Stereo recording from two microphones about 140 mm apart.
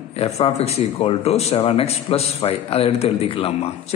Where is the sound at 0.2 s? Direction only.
45° left (ahead or behind).